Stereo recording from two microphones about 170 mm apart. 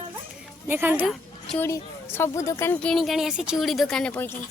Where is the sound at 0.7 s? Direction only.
15° right (ahead or behind).